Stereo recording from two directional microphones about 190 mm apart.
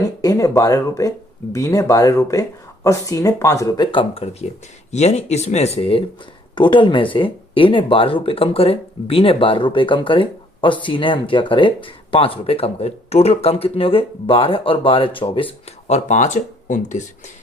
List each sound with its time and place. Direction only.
0.2 s speech: 20° left (ahead or behind); by 17.1 s 40° left (ahead or behind)